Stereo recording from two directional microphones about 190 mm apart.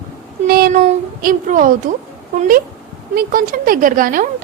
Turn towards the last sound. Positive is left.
turn(degrees=-45)  # may be behind; listen again after turning